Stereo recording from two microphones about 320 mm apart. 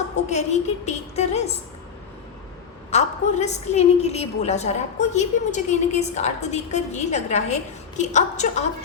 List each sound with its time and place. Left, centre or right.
0.3 s a woman's voice: left
2.9 s a woman's voice: left